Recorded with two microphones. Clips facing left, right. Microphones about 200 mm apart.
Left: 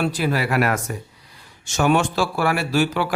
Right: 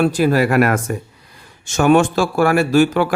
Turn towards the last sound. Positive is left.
turn(degrees=-50)  # may be behind; listen again after turning